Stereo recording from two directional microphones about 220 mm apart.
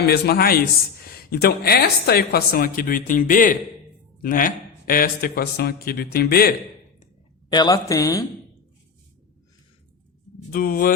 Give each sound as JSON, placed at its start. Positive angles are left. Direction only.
{"t": 0.0, "sound": "a woman's voice", "side_deg": 45}
{"t": 7.5, "sound": "speech", "side_deg": 20}
{"t": 10.5, "sound": "speech", "side_deg": 40}